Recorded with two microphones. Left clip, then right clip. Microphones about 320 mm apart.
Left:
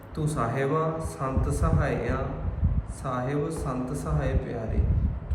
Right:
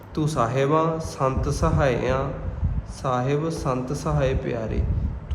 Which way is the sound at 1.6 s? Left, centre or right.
Centre.